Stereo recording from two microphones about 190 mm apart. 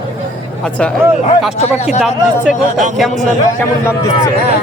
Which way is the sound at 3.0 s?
Centre (ahead or behind).